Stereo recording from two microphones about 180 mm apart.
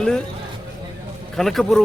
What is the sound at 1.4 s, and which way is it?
Speech, centre (ahead or behind).